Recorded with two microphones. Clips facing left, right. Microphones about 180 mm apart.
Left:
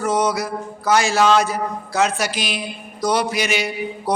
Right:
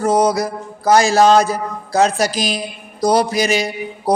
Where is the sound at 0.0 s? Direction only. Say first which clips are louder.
Right 5 dB; 35° right (ahead or behind).